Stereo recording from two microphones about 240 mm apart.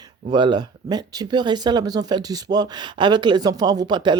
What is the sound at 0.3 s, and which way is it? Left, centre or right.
Speech, centre.